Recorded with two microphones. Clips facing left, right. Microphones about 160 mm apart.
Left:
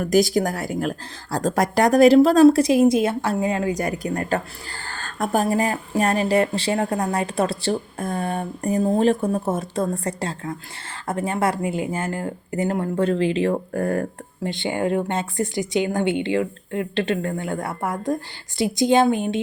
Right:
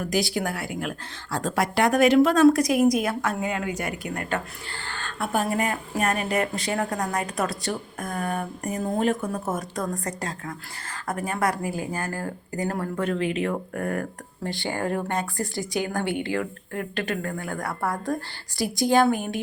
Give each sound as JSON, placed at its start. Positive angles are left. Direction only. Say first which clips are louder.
{"t": 0.0, "sound": "a woman's voice", "louder": "left 7 dB", "side_deg": 45}
{"t": 14.4, "sound": "a woman's voice", "louder": "left 4 dB", "side_deg": 20}